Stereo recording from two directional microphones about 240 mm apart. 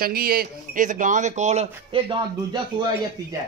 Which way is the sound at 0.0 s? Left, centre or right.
Right.